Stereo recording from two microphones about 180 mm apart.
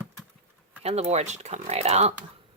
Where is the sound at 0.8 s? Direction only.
35° right (ahead or behind).